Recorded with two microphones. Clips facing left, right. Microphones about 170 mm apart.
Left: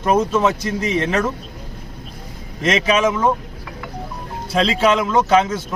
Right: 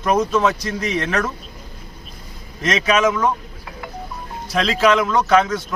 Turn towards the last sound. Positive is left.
turn(degrees=25)  # may be behind; listen again after turning